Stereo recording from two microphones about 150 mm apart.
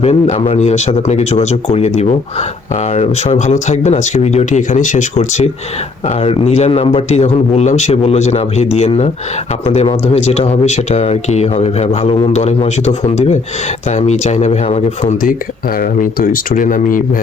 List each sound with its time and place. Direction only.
0.0 s speech: 45° left (ahead or behind)
15.8 s speech: 70° left (ahead or behind)